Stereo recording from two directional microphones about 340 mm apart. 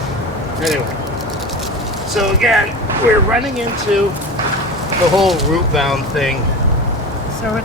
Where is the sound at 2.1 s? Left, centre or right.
Centre.